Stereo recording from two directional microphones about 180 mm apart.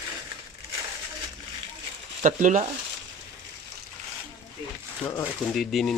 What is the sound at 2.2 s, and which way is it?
Speech, 45° right (ahead or behind).